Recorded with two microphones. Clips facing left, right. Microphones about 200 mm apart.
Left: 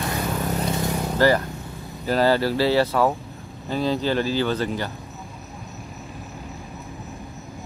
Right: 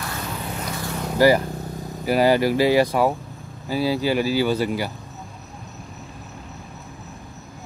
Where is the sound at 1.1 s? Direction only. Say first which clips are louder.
Right 3 dB; 10° right (ahead or behind).